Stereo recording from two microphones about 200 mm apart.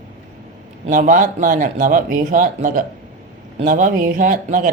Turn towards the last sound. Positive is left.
turn(degrees=-40)  # may be behind; listen again after turning